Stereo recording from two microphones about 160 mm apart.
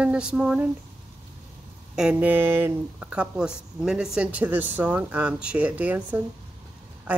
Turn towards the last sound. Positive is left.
turn(degrees=-10)  # may be behind; listen again after turning